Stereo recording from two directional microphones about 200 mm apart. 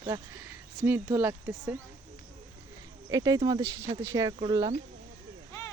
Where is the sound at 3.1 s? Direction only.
20° right (ahead or behind).